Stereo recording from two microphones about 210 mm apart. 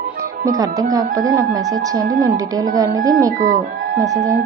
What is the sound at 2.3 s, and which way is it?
Speech, 15° right (ahead or behind).